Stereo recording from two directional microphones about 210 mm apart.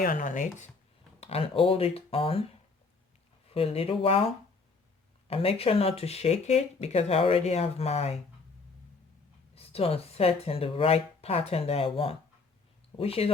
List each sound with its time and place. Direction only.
0.0 s speech: 40° left (ahead or behind)
3.5 s speech: 25° left (ahead or behind)
5.3 s speech: 25° left (ahead or behind)
9.6 s speech: 30° left (ahead or behind)